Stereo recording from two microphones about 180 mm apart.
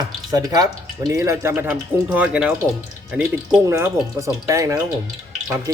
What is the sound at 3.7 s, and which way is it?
Speech, 15° right (ahead or behind).